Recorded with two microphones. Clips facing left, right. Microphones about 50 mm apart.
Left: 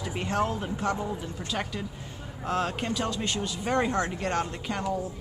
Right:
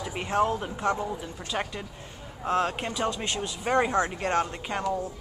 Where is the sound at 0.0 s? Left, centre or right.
Centre.